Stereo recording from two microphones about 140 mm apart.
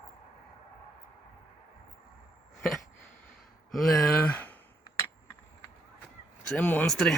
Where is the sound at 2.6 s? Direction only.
Centre (ahead or behind).